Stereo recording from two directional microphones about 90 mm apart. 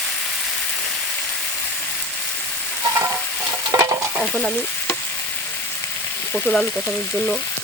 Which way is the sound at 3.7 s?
40° right (ahead or behind).